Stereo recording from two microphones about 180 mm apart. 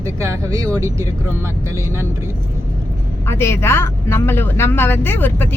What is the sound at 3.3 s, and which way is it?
Speech, 15° left (ahead or behind).